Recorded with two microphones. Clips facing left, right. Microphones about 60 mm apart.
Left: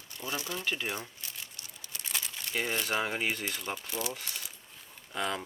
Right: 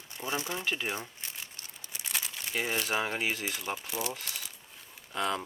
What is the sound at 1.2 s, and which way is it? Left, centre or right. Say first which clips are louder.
Crumpling: right 1 dB; right.